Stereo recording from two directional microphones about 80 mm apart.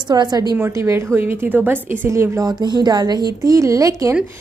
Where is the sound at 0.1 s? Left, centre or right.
Right.